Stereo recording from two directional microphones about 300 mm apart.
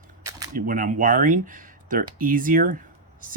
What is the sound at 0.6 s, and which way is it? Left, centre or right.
Speech, right.